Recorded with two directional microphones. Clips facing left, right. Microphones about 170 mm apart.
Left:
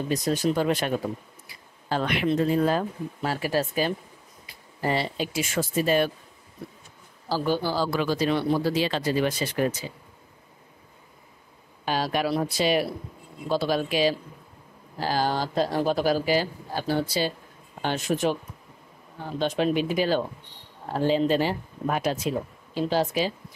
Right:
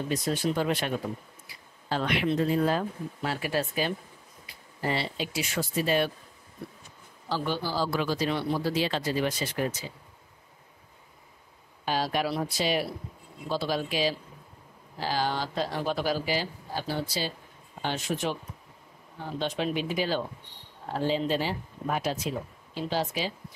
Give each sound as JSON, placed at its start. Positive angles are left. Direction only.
{"t": 0.1, "sound": "speech", "side_deg": 40}
{"t": 7.2, "sound": "speech", "side_deg": 40}
{"t": 7.7, "sound": "speech", "side_deg": 65}
{"t": 11.8, "sound": "speech", "side_deg": 65}
{"t": 15.0, "sound": "speech", "side_deg": 45}
{"t": 19.3, "sound": "speech", "side_deg": 45}
{"t": 22.8, "sound": "speech", "side_deg": 45}